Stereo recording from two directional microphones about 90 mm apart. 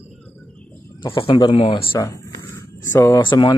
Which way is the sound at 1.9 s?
30° left (ahead or behind).